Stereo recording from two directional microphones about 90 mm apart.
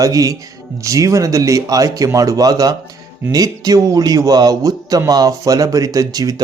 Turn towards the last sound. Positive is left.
turn(degrees=-40)  # may be behind; listen again after turning